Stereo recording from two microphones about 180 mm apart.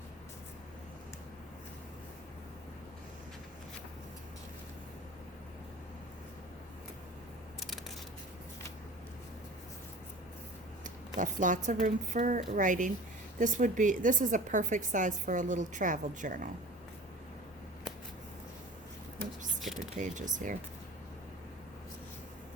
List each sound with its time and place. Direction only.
10.8 s a woman's voice: 45° right (ahead or behind)
19.6 s a sound: centre (ahead or behind)
20.0 s a woman's voice: 45° right (ahead or behind)